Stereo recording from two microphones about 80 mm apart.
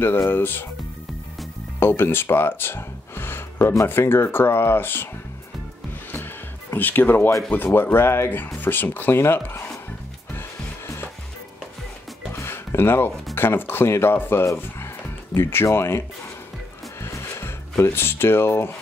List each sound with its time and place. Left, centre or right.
0.3 s speech: left
1.8 s speech: left
6.1 s music: left
7.5 s speech: left
12.4 s speech: left
17.0 s music: left